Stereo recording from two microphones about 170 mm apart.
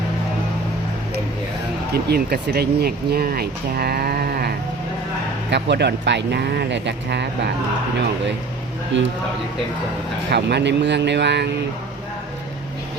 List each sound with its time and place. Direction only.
1.9 s speech: 70° right (ahead or behind)
5.5 s speech: 85° right
8.9 s speech: 90° right
10.3 s speech: 85° right